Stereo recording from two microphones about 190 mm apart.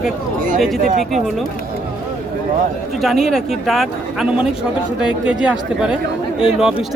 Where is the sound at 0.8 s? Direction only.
40° right (ahead or behind).